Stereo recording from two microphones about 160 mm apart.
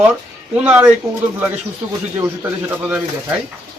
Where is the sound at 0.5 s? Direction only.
10° right (ahead or behind).